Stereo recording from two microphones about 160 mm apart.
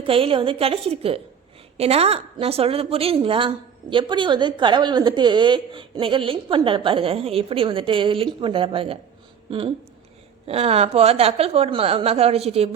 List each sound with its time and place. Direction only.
0.0 s a woman's voice: 35° right (ahead or behind)